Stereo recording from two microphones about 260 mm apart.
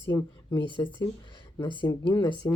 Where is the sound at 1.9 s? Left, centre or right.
Centre.